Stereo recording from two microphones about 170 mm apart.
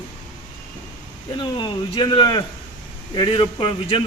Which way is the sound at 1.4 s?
25° left (ahead or behind).